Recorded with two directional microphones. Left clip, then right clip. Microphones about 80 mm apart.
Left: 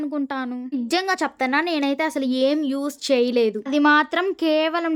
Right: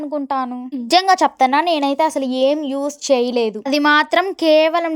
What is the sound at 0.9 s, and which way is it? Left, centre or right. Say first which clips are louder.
A woman's voice: right 10 dB; right.